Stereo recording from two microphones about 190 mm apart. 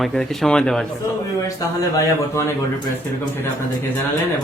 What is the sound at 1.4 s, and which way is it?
A man's voice, 15° left (ahead or behind).